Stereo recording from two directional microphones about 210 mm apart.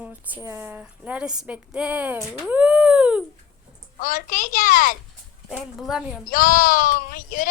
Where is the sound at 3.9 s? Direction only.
40° left (ahead or behind).